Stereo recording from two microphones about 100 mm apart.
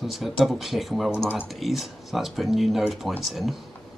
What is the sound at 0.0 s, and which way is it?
Speech, centre (ahead or behind).